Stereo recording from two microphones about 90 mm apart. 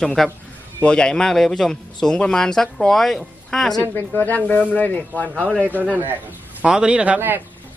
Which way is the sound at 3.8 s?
20° left (ahead or behind).